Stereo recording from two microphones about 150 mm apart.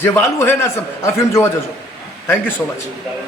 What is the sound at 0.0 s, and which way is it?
A woman's voice, 15° left (ahead or behind).